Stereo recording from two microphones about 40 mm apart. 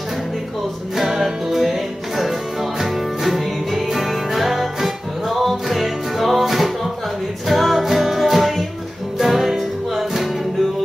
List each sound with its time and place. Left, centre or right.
1.2 s music: centre